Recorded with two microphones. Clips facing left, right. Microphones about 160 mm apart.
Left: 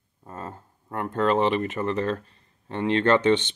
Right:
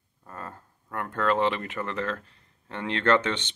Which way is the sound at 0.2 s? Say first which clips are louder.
Left 3 dB; 25° left (ahead or behind).